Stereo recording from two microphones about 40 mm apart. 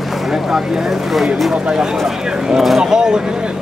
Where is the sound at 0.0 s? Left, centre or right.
Centre.